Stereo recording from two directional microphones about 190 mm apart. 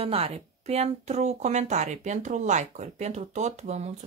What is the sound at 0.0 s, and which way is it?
Speech, 30° right (ahead or behind).